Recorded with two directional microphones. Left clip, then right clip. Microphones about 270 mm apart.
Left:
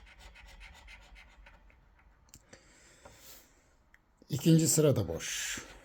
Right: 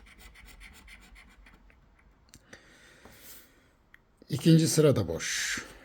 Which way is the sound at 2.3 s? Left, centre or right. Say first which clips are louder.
Right 5 dB; centre.